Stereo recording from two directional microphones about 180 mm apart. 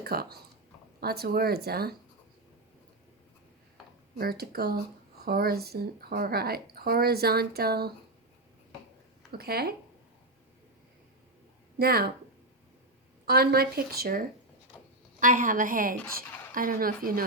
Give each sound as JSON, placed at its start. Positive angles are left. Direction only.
{"t": 0.0, "sound": "speech", "side_deg": -60}
{"t": 4.2, "sound": "speech", "side_deg": -60}
{"t": 9.4, "sound": "speech", "side_deg": -60}
{"t": 11.8, "sound": "speech", "side_deg": -60}
{"t": 13.2, "sound": "a woman's voice", "side_deg": -60}